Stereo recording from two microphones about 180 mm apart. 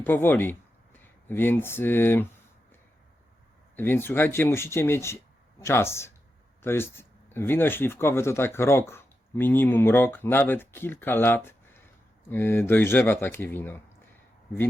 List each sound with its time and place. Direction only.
0.0 s speech: 10° left (ahead or behind)
3.8 s speech: 10° left (ahead or behind)